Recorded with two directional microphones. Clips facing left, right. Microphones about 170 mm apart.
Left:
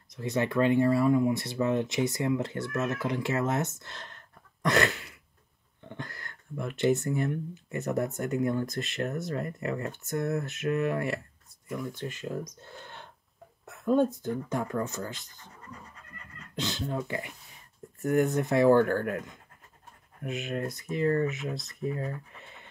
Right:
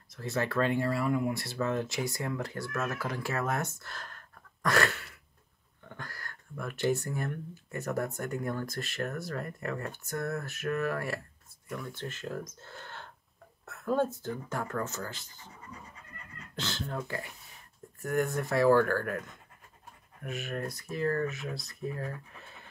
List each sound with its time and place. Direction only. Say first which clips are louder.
0.1 s speech: left 3 dB; 20° left (ahead or behind)
0.8 s speech: left 7 dB; centre (ahead or behind)
1.1 s speech: left 5 dB; 20° left (ahead or behind)
16.5 s a sound: left 4 dB; 20° left (ahead or behind)
16.9 s speech: left 4 dB; 20° left (ahead or behind)